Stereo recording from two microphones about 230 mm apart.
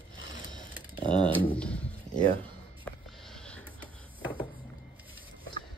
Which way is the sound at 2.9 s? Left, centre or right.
Centre.